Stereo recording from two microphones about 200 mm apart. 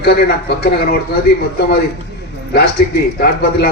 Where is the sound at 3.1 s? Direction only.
50° left (ahead or behind).